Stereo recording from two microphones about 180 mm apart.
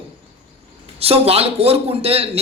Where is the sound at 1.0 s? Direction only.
35° right (ahead or behind).